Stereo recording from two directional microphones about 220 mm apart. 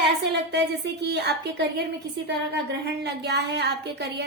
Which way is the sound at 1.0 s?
50° right (ahead or behind).